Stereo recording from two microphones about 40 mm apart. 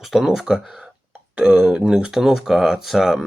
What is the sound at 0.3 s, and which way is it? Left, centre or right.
A man's voice, centre.